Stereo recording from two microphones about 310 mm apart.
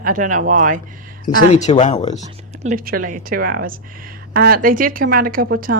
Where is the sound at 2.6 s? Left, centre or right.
Right.